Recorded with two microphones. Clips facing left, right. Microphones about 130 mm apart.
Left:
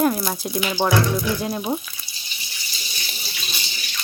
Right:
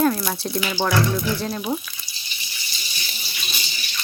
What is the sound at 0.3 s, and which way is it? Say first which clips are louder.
Speech: left 1 dB; 10° left (ahead or behind).